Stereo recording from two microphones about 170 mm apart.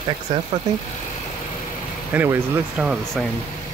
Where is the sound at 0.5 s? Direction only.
40° right (ahead or behind).